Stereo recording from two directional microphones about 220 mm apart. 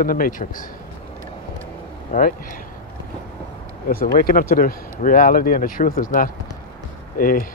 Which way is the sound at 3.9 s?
45° left (ahead or behind).